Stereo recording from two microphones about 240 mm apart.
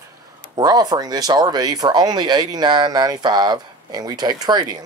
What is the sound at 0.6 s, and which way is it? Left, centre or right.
Speech, centre.